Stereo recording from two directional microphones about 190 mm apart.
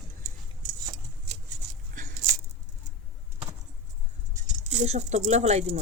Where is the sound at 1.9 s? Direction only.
45° right (ahead or behind).